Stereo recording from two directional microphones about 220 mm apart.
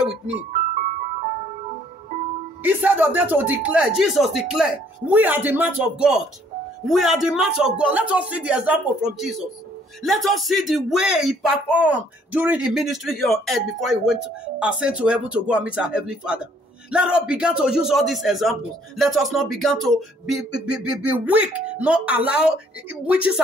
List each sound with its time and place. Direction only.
2.6 s a man's voice: 5° right (ahead or behind)